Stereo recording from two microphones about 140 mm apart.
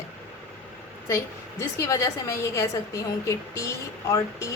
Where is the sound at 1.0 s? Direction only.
20° left (ahead or behind).